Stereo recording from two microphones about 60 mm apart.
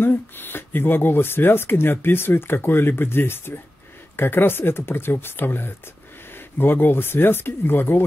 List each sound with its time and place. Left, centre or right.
0.0 s speech: left